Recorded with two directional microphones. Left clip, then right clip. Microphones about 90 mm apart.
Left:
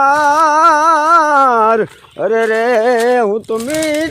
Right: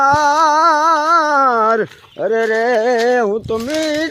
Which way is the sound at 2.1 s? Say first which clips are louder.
Left 2 dB; 5° right (ahead or behind).